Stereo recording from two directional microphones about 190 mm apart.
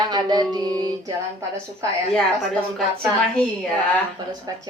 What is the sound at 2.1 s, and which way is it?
Speech, 5° left (ahead or behind).